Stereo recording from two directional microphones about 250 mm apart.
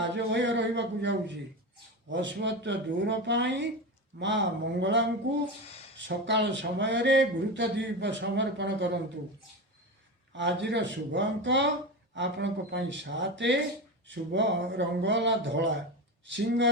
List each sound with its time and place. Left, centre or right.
0.0 s speech: right
10.3 s speech: right